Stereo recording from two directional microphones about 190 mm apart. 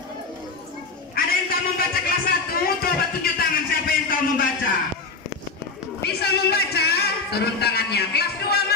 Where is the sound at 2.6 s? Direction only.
50° left (ahead or behind).